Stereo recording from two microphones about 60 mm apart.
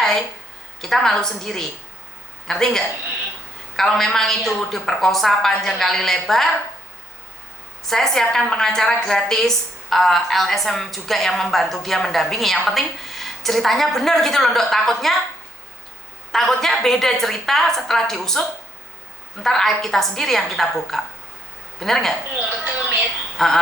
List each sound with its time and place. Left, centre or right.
0.8 s a woman's voice: centre
7.9 s a woman's voice: centre
16.3 s a woman's voice: centre
22.6 s speech: right
23.4 s a woman's voice: centre